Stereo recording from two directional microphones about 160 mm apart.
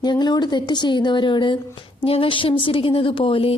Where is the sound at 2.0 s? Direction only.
35° left (ahead or behind).